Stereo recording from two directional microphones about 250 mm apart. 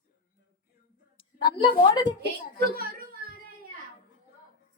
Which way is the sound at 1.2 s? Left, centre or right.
Centre.